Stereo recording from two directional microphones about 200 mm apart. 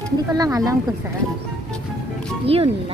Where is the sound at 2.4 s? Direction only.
30° right (ahead or behind).